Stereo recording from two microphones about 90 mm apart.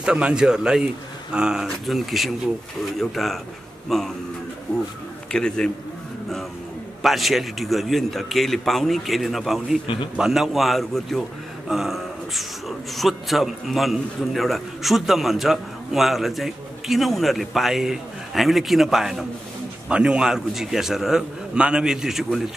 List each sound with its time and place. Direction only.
0.0 s a man's voice: 10° right (ahead or behind)
4.7 s a man's voice: 15° left (ahead or behind)
7.0 s speech: centre (ahead or behind)